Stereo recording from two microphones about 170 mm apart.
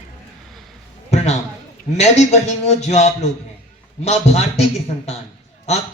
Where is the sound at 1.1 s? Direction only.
40° left (ahead or behind).